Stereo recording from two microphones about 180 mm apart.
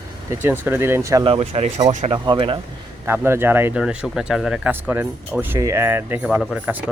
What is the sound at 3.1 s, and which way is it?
Speech, 15° right (ahead or behind).